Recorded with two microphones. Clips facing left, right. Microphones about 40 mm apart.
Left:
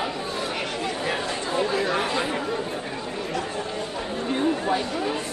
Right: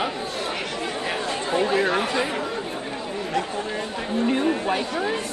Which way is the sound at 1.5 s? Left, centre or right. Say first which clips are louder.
Right 3 dB; right.